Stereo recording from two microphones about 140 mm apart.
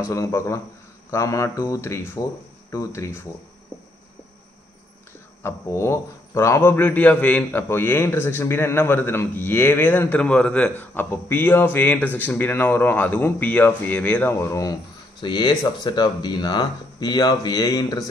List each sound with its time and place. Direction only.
0.1 s speech: 20° left (ahead or behind)
5.4 s a man's voice: 20° left (ahead or behind)